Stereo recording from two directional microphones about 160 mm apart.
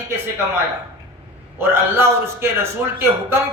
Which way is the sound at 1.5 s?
15° right (ahead or behind).